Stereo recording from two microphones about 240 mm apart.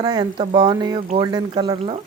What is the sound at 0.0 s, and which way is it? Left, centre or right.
Speech, centre.